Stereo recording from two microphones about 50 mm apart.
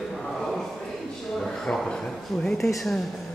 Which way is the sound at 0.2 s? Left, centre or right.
Centre.